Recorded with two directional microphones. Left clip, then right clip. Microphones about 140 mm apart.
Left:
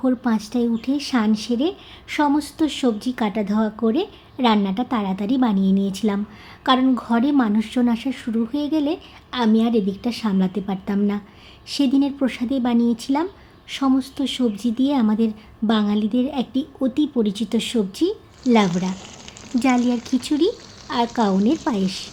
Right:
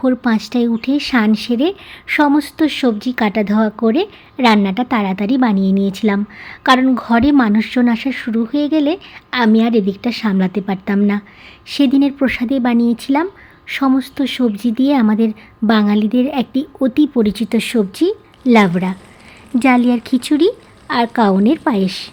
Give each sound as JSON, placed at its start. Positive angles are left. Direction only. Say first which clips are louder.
{"t": 0.0, "sound": "speech", "louder": "right 6 dB", "side_deg": -30}